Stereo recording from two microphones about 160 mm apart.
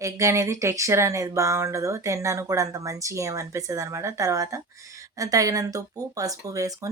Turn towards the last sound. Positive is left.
turn(degrees=-20)  # may be behind; listen again after turning